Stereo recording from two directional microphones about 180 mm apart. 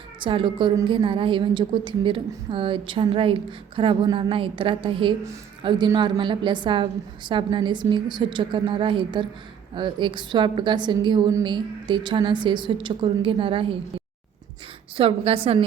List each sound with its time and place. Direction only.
0.2 s a woman's voice: 30° right (ahead or behind)
14.9 s a woman's voice: 30° right (ahead or behind)